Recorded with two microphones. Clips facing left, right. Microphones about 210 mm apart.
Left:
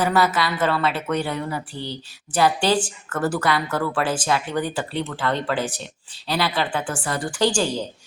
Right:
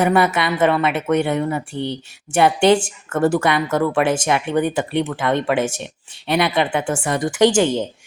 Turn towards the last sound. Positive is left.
turn(degrees=-20)  # may be behind; listen again after turning